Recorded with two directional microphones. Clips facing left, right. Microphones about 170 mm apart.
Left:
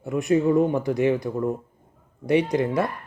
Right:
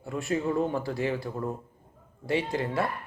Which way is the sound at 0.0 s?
20° left (ahead or behind).